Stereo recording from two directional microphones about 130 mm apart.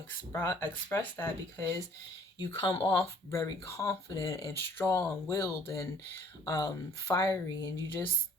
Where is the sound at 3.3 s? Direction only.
25° left (ahead or behind).